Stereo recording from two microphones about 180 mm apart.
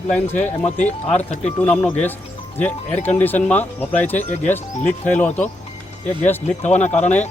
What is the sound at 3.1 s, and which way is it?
Speech, 10° left (ahead or behind).